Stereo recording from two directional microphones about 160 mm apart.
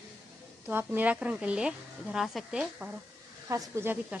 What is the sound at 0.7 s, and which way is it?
Speech, 15° right (ahead or behind).